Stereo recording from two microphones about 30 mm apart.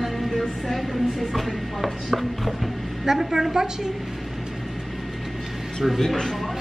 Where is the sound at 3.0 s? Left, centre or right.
Centre.